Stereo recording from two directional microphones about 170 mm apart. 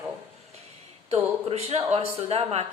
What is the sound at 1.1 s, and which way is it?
A woman's voice, 40° right (ahead or behind).